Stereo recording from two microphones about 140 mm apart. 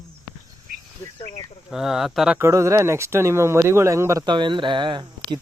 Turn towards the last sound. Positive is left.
turn(degrees=-35)  # may be behind; listen again after turning